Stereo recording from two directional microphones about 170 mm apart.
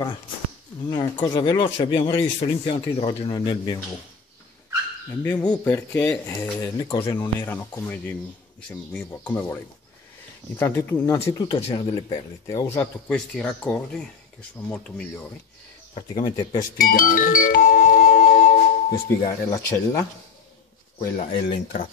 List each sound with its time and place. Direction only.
0.8 s a man's voice: 25° left (ahead or behind)
5.3 s a man's voice: 25° left (ahead or behind)
5.7 s speech: 10° left (ahead or behind)
6.6 s a man's voice: 25° left (ahead or behind)
7.4 s a man's voice: 10° left (ahead or behind); by 12.2 s 30° left (ahead or behind)
12.4 s speech: 15° left (ahead or behind)
13.1 s speech: 5° left (ahead or behind)
16.2 s a man's voice: 25° left (ahead or behind)
16.7 s music: 55° left (ahead or behind)
18.9 s speech: 20° left (ahead or behind)
21.2 s speech: 50° left (ahead or behind)